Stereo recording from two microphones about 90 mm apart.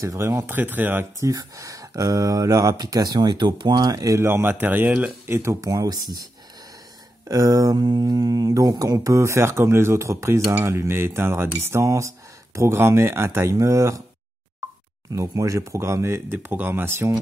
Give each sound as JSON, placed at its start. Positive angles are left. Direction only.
{"t": 0.0, "sound": "speech", "side_deg": -30}
{"t": 1.2, "sound": "speech", "side_deg": -40}
{"t": 4.3, "sound": "speech", "side_deg": -25}
{"t": 5.6, "sound": "speech", "side_deg": -45}
{"t": 7.2, "sound": "speech", "side_deg": -40}
{"t": 15.1, "sound": "speech", "side_deg": -35}
{"t": 16.4, "sound": "speech", "side_deg": -20}